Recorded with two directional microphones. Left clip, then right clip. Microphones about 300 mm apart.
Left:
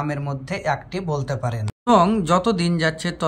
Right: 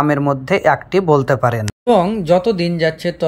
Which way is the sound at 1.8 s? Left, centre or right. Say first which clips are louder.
Right 2 dB; centre.